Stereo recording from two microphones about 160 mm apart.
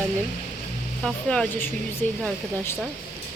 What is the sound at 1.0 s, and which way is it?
A woman's voice, 5° left (ahead or behind).